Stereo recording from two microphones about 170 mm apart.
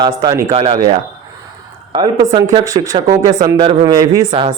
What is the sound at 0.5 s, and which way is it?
Speech, 35° right (ahead or behind).